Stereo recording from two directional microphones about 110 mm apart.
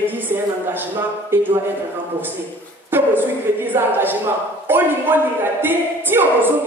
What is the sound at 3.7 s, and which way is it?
A woman's voice, 20° right (ahead or behind).